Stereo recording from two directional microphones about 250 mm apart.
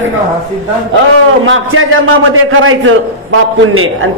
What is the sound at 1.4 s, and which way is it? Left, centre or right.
Mantra, right.